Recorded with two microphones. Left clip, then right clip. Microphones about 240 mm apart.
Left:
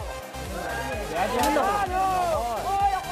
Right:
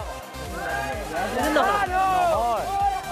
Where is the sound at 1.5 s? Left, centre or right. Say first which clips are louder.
Right 3 dB; right.